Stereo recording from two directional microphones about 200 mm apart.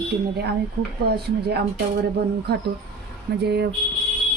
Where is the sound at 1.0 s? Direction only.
55° right (ahead or behind).